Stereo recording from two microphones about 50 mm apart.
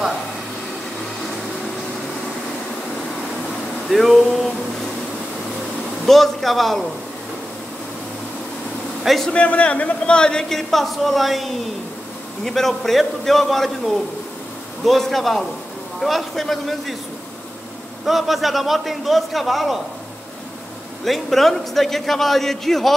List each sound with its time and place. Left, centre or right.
3.9 s a man's voice: centre
6.0 s a man's voice: centre
9.0 s a man's voice: centre
9.3 s a man's voice: left
10.5 s a man's voice: centre
18.0 s a man's voice: centre
21.0 s a man's voice: centre